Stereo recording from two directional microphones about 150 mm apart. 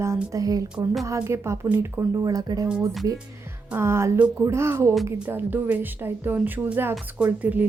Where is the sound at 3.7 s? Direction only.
15° right (ahead or behind).